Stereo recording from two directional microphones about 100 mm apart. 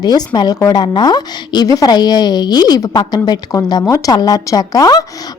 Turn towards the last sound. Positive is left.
turn(degrees=40)  # may be behind; listen again after turning